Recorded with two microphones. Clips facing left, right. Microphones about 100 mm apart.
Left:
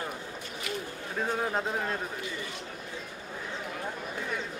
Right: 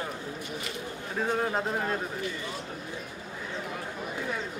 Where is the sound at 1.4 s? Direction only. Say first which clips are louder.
Right 2 dB; centre (ahead or behind).